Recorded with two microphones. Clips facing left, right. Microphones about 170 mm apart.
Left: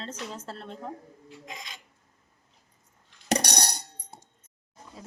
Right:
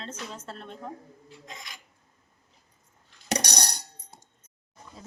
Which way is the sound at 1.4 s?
15° left (ahead or behind).